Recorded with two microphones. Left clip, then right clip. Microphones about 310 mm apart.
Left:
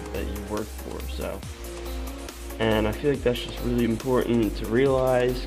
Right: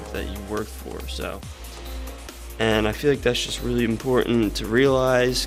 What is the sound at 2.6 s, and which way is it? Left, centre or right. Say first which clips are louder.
Speech: right 3 dB; right.